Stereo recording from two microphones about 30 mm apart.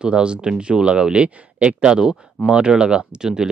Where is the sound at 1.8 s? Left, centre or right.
Right.